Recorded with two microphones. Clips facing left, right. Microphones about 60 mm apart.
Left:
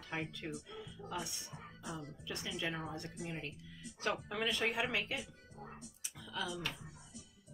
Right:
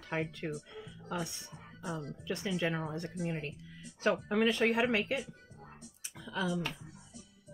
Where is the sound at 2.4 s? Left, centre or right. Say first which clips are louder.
Right 6 dB; right.